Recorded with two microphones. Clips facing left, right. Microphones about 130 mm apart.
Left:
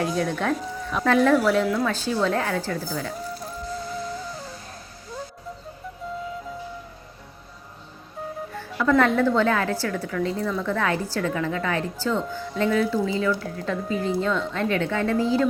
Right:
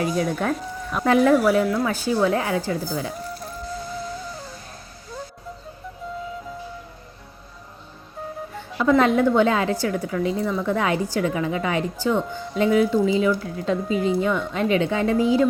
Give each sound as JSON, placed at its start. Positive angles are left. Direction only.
{"t": 0.0, "sound": "a woman's voice", "side_deg": -5}
{"t": 8.5, "sound": "a woman's voice", "side_deg": -20}